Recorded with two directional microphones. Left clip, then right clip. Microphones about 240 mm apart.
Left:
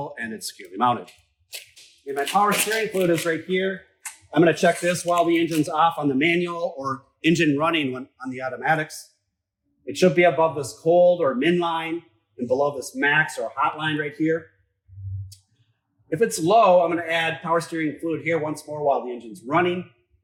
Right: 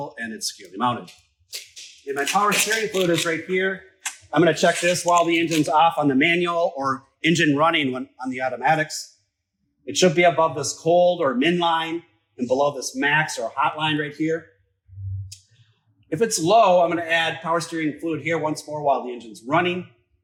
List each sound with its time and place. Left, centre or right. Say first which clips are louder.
0.0 s speech: right 1 dB; centre
2.0 s speech: even; centre
5.6 s speech: right 3 dB; centre
6.5 s speech: right 6 dB; centre
7.2 s speech: right 1 dB; centre
9.8 s speech: right 1 dB; centre
12.5 s speech: right 1 dB; centre
16.0 s speech: right 1 dB; centre